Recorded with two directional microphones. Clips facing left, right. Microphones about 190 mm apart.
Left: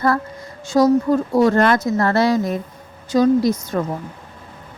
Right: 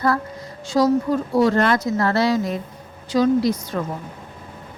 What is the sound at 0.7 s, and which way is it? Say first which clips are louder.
Speech: left 3 dB; 45° left (ahead or behind).